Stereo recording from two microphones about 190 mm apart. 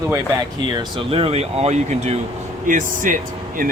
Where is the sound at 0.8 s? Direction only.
25° right (ahead or behind).